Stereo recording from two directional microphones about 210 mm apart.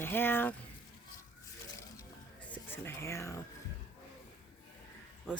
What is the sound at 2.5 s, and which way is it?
Speech, 10° left (ahead or behind).